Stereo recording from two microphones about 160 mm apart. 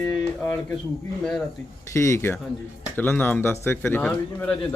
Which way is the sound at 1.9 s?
20° left (ahead or behind).